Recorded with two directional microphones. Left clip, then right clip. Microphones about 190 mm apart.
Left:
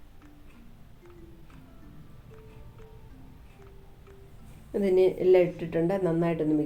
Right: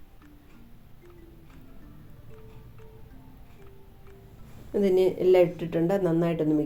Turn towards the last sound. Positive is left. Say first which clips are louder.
# right 1 dB
turn(degrees=-25)  # may be behind; listen again after turning